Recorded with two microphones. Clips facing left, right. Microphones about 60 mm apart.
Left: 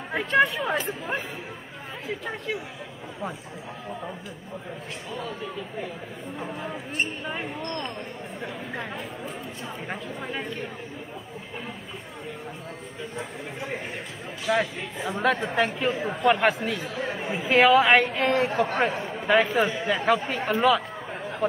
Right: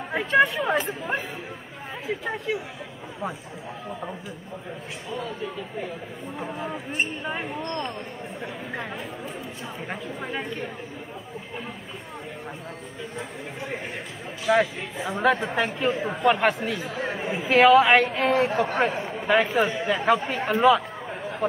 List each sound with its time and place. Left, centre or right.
0.1 s speech: centre
6.3 s speech: centre
14.4 s a man's voice: centre